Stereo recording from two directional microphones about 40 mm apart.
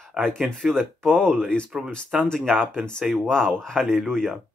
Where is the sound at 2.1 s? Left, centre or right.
Centre.